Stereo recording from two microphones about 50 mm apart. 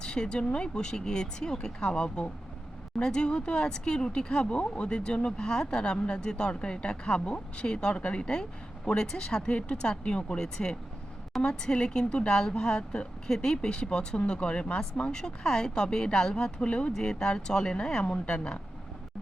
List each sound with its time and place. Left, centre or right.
0.0 s speech: centre